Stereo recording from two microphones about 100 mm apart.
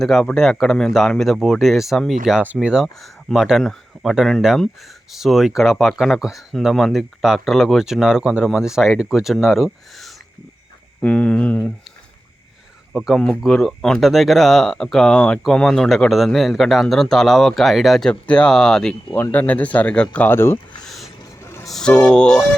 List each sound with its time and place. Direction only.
0.0 s speech: 5° left (ahead or behind)
2.4 s speech: 10° right (ahead or behind)
11.0 s speech: 10° left (ahead or behind)
12.9 s speech: 5° right (ahead or behind)
13.1 s speech: 5° left (ahead or behind)
19.1 s speech: 20° left (ahead or behind)
20.8 s a sound: centre (ahead or behind)
21.7 s speech: 5° left (ahead or behind)